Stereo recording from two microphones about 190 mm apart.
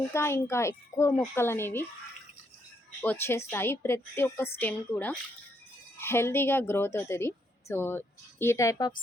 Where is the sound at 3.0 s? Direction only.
10° left (ahead or behind).